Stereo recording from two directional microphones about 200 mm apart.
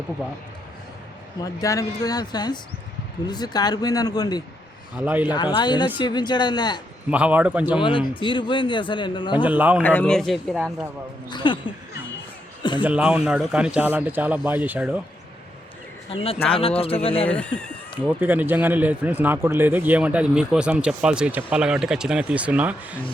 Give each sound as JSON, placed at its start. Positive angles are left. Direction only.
{"t": 1.4, "sound": "speech", "side_deg": 15}
{"t": 4.9, "sound": "speech", "side_deg": -10}
{"t": 5.3, "sound": "speech", "side_deg": 20}
{"t": 7.1, "sound": "speech", "side_deg": -5}
{"t": 7.8, "sound": "speech", "side_deg": 25}
{"t": 9.4, "sound": "speech", "side_deg": -10}
{"t": 9.8, "sound": "speech", "side_deg": 5}
{"t": 11.3, "sound": "speech", "side_deg": 25}
{"t": 12.8, "sound": "speech", "side_deg": -5}
{"t": 16.0, "sound": "speech", "side_deg": 30}
{"t": 17.2, "sound": "speech", "side_deg": 5}
{"t": 18.0, "sound": "speech", "side_deg": -10}